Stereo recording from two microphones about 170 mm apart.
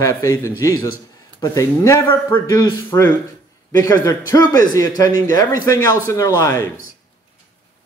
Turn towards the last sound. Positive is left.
turn(degrees=15)  # may be behind; listen again after turning